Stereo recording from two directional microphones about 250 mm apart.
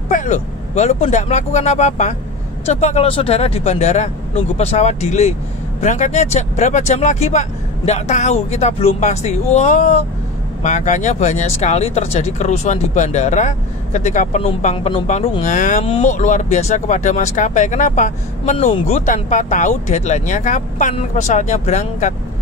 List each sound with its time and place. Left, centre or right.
0.1 s speech: left